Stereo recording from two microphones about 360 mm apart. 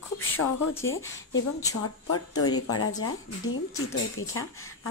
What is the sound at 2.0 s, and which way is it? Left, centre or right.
Speech, left.